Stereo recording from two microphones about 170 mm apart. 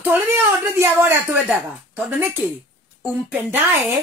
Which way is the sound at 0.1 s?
15° right (ahead or behind).